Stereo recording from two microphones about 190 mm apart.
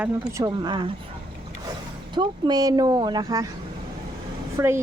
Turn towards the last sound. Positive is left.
turn(degrees=-15)  # may be behind; listen again after turning